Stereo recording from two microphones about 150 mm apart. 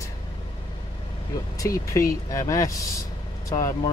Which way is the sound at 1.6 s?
20° left (ahead or behind).